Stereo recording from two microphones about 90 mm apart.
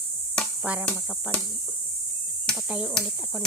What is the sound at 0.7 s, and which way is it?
Speech, 15° right (ahead or behind).